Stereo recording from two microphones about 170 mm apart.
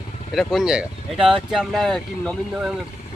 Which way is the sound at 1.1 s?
30° right (ahead or behind).